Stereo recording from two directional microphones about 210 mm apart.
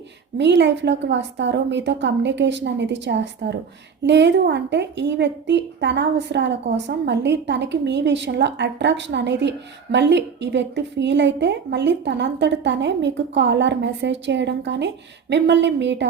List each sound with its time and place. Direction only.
0.3 s a woman's voice: 55° right (ahead or behind)